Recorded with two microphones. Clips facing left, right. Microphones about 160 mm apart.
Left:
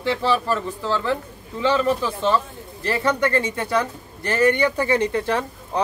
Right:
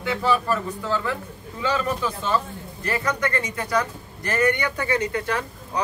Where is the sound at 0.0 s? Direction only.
30° left (ahead or behind).